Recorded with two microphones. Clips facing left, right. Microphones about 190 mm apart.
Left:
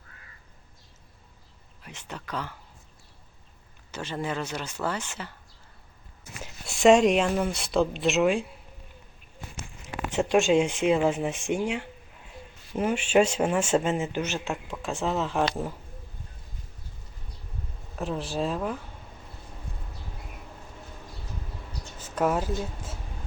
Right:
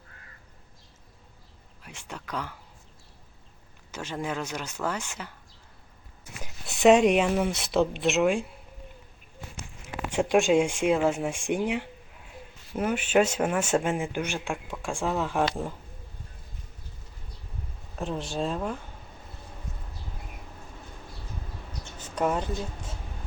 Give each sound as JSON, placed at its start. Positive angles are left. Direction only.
{"t": 1.8, "sound": "speech", "side_deg": -10}
{"t": 3.9, "sound": "speech", "side_deg": -10}
{"t": 6.7, "sound": "speech", "side_deg": 0}
{"t": 10.1, "sound": "a sound", "side_deg": -15}
{"t": 10.5, "sound": "speech", "side_deg": -10}
{"t": 12.7, "sound": "speech", "side_deg": -5}
{"t": 17.9, "sound": "speech", "side_deg": 0}
{"t": 22.0, "sound": "speech", "side_deg": 5}